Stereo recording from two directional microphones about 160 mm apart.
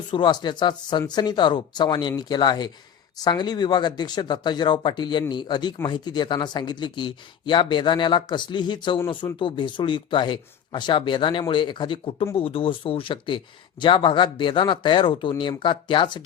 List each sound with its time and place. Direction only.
0.1 s speech: 30° left (ahead or behind)